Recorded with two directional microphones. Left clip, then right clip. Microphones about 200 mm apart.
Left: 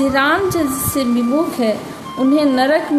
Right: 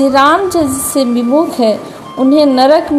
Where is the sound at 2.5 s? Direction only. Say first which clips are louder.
Right 7 dB; 15° right (ahead or behind).